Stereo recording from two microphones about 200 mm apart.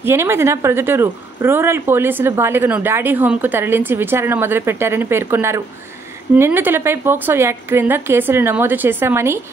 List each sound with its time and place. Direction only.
0.0 s speech: 10° right (ahead or behind)